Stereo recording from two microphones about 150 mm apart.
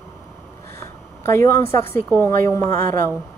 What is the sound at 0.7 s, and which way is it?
A woman's voice, 20° left (ahead or behind).